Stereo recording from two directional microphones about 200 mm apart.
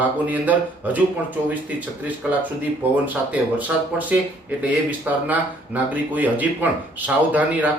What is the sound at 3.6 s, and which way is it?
Speech, 10° right (ahead or behind).